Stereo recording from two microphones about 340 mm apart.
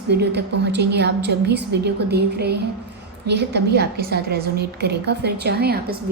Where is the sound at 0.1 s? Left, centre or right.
Right.